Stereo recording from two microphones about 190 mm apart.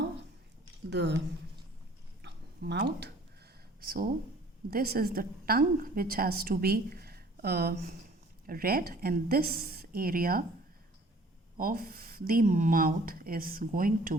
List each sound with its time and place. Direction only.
0.9 s speech: 65° right (ahead or behind)
2.2 s a sound: 60° right (ahead or behind)
3.8 s a woman's voice: 50° right (ahead or behind)
11.5 s a woman's voice: 50° right (ahead or behind)